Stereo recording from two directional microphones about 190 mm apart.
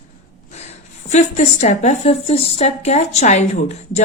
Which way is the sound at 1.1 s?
35° left (ahead or behind).